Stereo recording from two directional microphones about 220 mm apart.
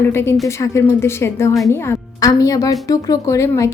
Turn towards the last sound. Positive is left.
turn(degrees=15)  # may be behind; listen again after turning